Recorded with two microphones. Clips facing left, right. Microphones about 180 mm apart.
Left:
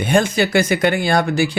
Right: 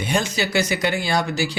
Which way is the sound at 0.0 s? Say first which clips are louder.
Left 7 dB; 55° left (ahead or behind).